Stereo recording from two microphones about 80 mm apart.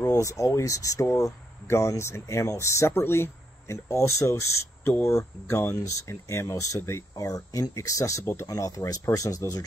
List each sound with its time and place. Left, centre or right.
0.1 s speech: left